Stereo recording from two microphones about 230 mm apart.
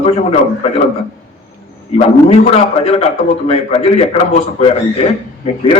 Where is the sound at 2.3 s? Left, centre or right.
Left.